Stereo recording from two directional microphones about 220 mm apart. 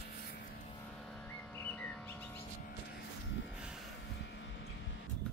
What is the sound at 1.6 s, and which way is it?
Bird, 5° left (ahead or behind).